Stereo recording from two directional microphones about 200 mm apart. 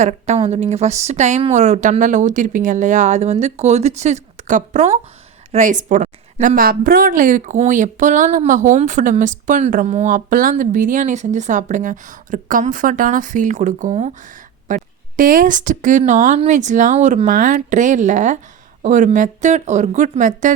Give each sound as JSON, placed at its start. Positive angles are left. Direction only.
{"t": 0.0, "sound": "a woman's voice", "side_deg": -35}